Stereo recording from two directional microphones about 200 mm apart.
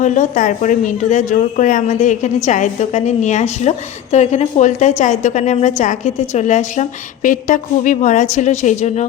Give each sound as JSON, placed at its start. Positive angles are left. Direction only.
{"t": 0.0, "sound": "speech", "side_deg": 40}